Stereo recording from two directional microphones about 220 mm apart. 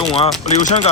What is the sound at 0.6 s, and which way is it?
Speech, 25° left (ahead or behind).